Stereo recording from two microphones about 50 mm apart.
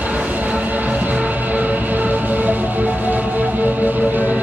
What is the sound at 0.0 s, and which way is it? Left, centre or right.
Train, right.